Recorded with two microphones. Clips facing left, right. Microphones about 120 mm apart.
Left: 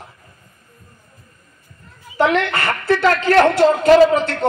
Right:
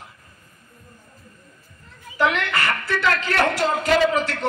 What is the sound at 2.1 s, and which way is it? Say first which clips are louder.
A man's voice: left 5 dB; 30° left (ahead or behind).